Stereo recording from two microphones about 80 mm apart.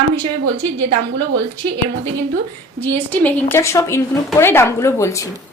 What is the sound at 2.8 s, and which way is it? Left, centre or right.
Speech, left.